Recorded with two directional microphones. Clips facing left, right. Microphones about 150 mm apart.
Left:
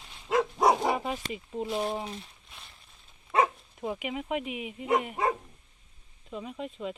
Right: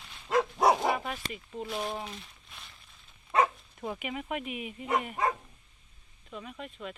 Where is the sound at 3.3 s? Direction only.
15° left (ahead or behind).